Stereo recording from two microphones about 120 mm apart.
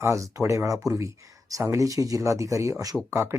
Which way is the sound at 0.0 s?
25° right (ahead or behind).